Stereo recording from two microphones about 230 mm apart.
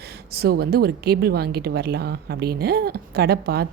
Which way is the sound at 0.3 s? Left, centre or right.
Right.